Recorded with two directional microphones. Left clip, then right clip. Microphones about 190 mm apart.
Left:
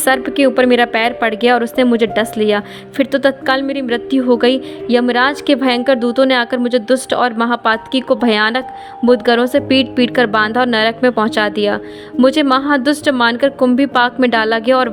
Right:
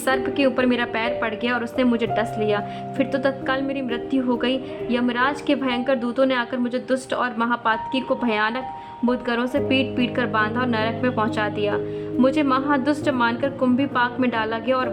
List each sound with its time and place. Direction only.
0.0 s a woman's voice: 30° left (ahead or behind)